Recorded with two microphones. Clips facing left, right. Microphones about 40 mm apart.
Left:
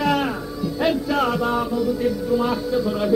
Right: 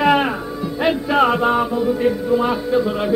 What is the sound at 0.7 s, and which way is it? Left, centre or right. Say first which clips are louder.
Music: right 4 dB; right.